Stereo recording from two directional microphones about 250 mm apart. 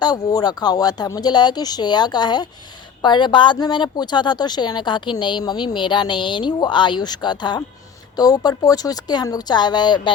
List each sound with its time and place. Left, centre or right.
0.0 s speech: centre